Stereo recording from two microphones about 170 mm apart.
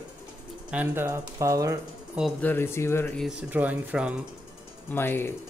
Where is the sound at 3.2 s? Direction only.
10° right (ahead or behind).